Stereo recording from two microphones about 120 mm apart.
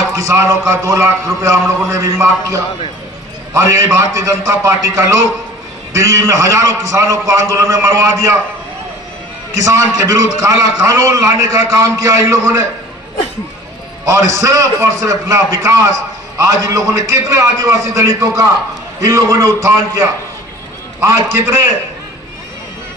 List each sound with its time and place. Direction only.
0.1 s a man's voice: 25° right (ahead or behind)
9.5 s a man's voice: 25° right (ahead or behind)
14.0 s a man's voice: 25° right (ahead or behind)